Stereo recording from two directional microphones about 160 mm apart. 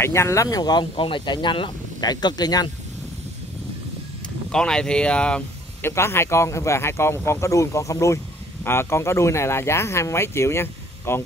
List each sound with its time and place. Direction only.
0.0 s speech: 15° left (ahead or behind)
4.5 s speech: 5° left (ahead or behind)